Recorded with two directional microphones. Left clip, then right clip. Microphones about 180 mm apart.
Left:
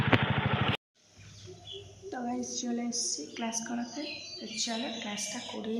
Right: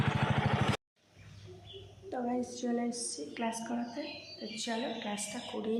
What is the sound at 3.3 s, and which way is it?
A woman's voice, 5° right (ahead or behind).